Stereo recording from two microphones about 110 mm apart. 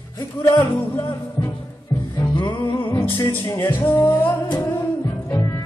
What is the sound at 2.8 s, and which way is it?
Music, 25° left (ahead or behind).